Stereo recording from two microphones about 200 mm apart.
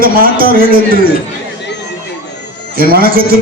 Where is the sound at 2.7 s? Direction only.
50° right (ahead or behind).